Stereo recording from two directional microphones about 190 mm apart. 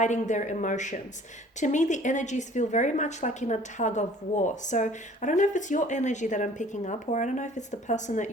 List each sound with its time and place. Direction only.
0.0 s a woman's voice: 40° left (ahead or behind)